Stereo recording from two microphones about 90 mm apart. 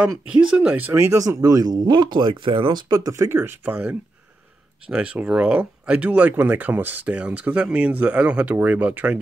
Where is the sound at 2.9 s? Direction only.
40° right (ahead or behind).